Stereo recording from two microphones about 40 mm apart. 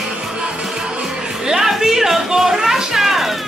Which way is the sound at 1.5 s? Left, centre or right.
Centre.